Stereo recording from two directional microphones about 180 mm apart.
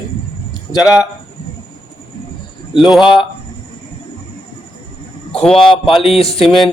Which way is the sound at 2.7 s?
5° right (ahead or behind).